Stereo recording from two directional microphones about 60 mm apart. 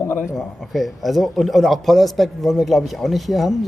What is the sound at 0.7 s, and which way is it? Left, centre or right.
A man's voice, centre.